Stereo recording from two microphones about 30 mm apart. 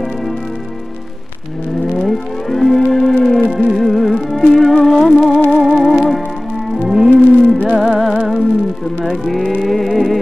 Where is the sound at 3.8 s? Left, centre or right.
Centre.